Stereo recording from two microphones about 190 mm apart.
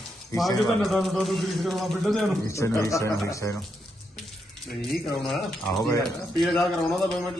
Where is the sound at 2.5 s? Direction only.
15° left (ahead or behind).